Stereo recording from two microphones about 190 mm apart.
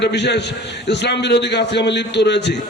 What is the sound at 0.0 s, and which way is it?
A man's voice, 65° left (ahead or behind).